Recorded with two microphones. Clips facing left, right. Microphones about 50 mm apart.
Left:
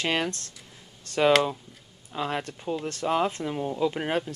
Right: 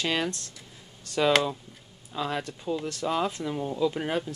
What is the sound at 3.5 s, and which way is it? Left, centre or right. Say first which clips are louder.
Speech: right 1 dB; left.